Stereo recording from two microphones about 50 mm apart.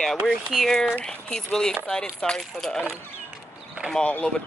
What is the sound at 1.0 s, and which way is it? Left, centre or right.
Speech, centre.